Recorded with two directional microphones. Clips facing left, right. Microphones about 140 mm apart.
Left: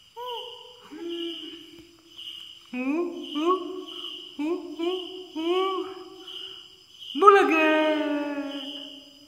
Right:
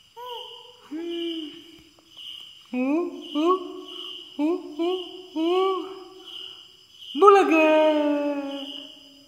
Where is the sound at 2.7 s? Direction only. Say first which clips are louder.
Right 3 dB; 25° right (ahead or behind).